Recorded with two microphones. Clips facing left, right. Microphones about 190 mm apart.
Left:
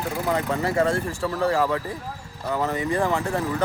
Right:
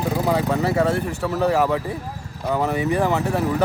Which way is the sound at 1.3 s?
20° right (ahead or behind).